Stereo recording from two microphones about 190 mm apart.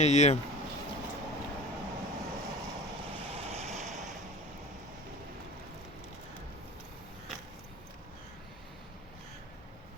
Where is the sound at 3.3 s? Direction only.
35° right (ahead or behind).